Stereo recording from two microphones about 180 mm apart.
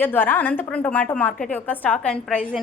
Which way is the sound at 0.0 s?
10° left (ahead or behind).